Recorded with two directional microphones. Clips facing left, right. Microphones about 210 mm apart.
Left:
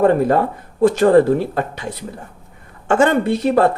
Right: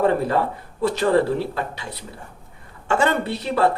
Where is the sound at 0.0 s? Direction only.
50° left (ahead or behind).